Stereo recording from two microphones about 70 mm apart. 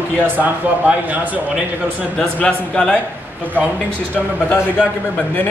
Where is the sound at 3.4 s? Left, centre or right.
Right.